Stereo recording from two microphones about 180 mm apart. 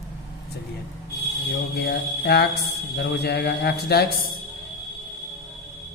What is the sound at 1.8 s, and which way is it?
Speech, 65° left (ahead or behind).